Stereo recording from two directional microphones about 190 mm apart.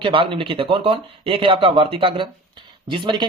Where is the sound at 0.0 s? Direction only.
25° right (ahead or behind).